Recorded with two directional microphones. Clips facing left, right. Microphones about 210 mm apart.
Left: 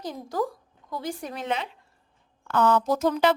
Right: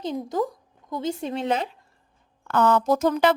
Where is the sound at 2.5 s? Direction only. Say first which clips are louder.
Right 2 dB; 55° right (ahead or behind).